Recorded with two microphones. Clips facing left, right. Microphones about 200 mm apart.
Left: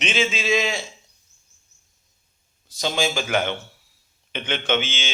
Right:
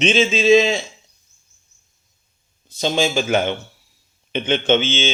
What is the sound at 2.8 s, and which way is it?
A man's voice, 25° right (ahead or behind).